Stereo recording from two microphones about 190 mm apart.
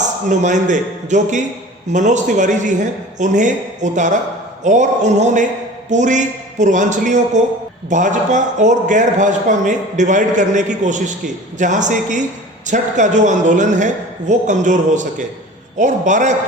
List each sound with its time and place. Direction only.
0.3 s a man's voice: 40° right (ahead or behind)